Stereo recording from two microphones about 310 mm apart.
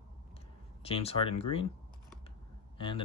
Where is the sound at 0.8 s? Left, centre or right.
Centre.